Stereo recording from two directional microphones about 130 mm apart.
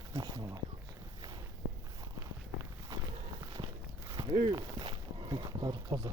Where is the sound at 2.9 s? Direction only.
25° right (ahead or behind).